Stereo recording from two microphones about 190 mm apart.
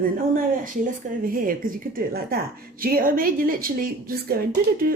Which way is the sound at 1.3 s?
45° right (ahead or behind).